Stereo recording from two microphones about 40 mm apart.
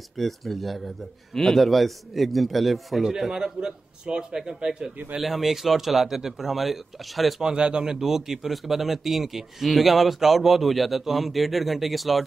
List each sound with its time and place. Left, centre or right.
0.2 s a man's voice: centre
3.0 s a man's voice: centre
5.2 s a man's voice: centre
7.4 s a man's voice: right; by 12.3 s centre